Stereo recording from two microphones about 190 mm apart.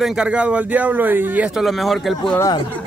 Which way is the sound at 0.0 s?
5° right (ahead or behind).